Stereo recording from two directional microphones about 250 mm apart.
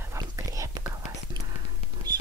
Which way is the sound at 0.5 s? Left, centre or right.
Centre.